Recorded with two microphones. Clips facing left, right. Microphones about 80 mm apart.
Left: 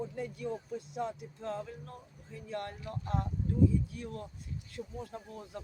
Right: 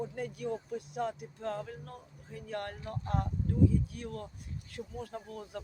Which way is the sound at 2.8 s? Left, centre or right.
Right.